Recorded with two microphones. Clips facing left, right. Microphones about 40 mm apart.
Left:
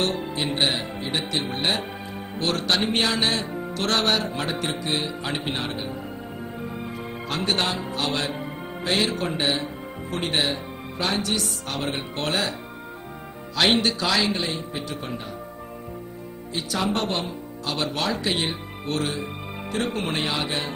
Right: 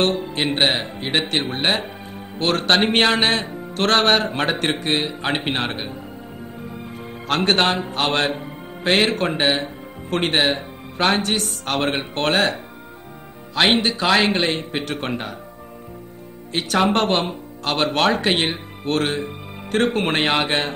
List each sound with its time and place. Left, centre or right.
0.3 s speech: right
6.6 s music: centre
7.2 s speech: right
13.6 s speech: right
16.5 s speech: right